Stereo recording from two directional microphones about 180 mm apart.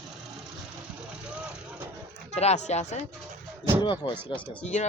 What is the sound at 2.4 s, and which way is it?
Speech, 40° left (ahead or behind).